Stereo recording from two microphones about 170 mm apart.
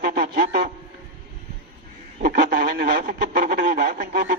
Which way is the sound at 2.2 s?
65° right (ahead or behind).